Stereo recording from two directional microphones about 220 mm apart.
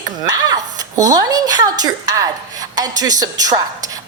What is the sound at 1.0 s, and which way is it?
A woman's voice, 15° right (ahead or behind).